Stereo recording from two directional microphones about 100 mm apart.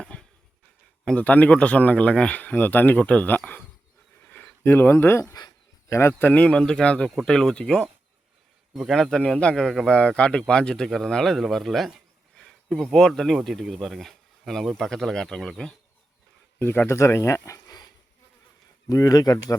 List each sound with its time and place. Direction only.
0.0 s a sound: 10° left (ahead or behind)
1.0 s a man's voice: 15° left (ahead or behind)
4.2 s a sound: 15° left (ahead or behind)
5.3 s speech: 40° left (ahead or behind)
5.9 s speech: 25° left (ahead or behind)
6.4 s a man's voice: 10° left (ahead or behind)
8.7 s a man's voice: centre (ahead or behind)
16.6 s speech: 25° left (ahead or behind); by 19.5 s 40° left (ahead or behind)